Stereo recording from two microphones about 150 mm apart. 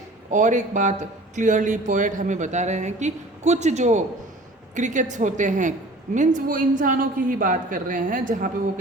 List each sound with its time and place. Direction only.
0.3 s speech: 55° right (ahead or behind)